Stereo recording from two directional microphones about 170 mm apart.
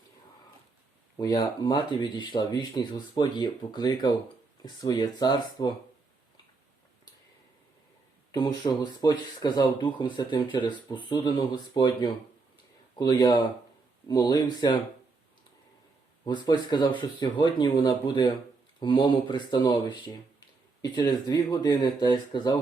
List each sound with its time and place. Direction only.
1.1 s speech: 20° left (ahead or behind)
8.3 s speech: 25° left (ahead or behind)
16.2 s speech: 25° left (ahead or behind)